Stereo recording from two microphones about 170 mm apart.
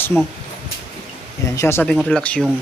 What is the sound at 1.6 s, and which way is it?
Speech, 15° left (ahead or behind).